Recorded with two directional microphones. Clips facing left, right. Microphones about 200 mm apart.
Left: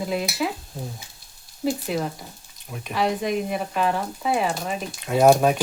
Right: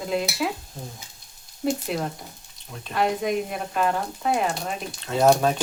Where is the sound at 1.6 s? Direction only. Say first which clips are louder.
Left 1 dB; centre (ahead or behind).